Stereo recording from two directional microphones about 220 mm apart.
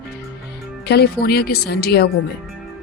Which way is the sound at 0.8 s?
45° left (ahead or behind).